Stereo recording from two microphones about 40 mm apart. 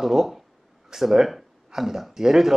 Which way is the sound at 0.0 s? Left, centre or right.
Centre.